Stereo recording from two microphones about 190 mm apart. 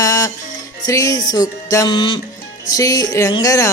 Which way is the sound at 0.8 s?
15° left (ahead or behind).